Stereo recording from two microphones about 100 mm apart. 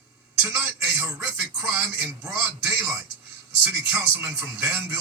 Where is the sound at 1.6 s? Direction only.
20° right (ahead or behind).